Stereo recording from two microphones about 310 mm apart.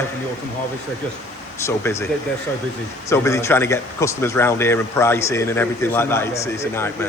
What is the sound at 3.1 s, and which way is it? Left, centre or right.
Speech, centre.